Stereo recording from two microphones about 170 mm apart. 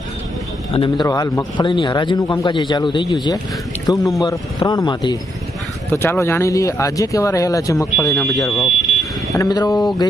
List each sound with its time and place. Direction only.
0.7 s a man's voice: 30° left (ahead or behind)
5.9 s speech: 15° left (ahead or behind)
10.0 s a sound: 20° left (ahead or behind)